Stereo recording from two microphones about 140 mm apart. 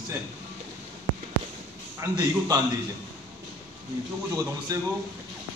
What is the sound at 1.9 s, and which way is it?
Speech, 25° right (ahead or behind).